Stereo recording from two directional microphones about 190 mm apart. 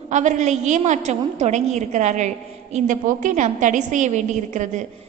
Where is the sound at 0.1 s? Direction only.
40° right (ahead or behind).